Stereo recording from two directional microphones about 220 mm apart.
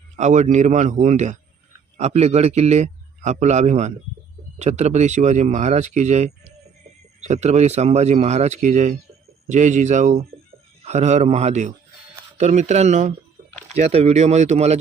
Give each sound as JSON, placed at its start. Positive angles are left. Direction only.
{"t": 0.2, "sound": "a man's voice", "side_deg": -30}